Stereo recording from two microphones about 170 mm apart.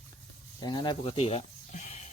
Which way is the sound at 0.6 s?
25° left (ahead or behind).